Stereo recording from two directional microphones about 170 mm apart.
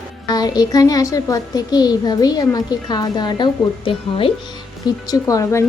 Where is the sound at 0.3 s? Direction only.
25° left (ahead or behind).